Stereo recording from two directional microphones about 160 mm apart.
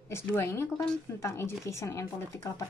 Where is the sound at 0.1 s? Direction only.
15° left (ahead or behind).